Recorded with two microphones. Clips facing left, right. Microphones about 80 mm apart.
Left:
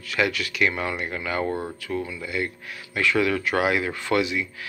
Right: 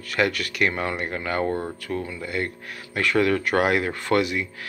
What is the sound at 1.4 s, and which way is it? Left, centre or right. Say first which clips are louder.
Speech: right 2 dB; centre.